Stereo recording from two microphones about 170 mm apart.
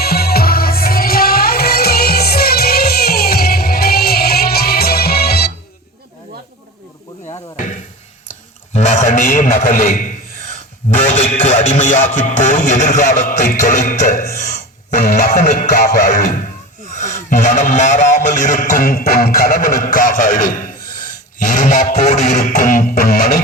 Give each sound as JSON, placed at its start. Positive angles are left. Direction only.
{"t": 0.0, "sound": "music", "side_deg": 65}
{"t": 7.5, "sound": "a sound", "side_deg": 45}
{"t": 8.7, "sound": "a man's voice", "side_deg": 45}
{"t": 11.1, "sound": "music", "side_deg": 40}
{"t": 16.9, "sound": "a man's voice", "side_deg": 45}